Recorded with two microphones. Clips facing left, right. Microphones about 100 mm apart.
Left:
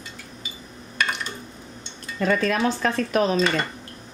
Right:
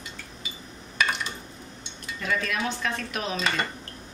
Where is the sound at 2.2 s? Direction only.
40° left (ahead or behind).